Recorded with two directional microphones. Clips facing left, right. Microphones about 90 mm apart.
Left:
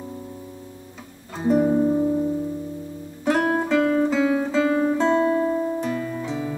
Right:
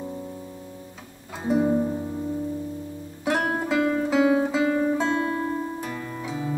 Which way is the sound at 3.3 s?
5° right (ahead or behind).